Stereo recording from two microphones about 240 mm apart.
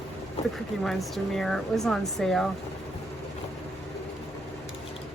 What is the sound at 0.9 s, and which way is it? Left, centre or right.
Speech, centre.